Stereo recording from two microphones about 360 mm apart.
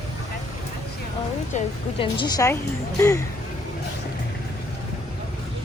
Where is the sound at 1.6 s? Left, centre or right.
Centre.